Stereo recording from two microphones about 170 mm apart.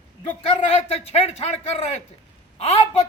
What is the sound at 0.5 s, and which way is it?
A man's voice, 35° left (ahead or behind).